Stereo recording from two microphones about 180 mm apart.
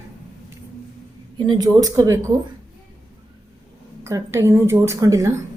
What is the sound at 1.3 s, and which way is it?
Speech, 25° right (ahead or behind).